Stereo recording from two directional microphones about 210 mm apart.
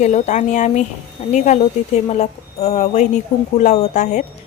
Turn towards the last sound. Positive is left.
turn(degrees=35)  # may be behind; listen again after turning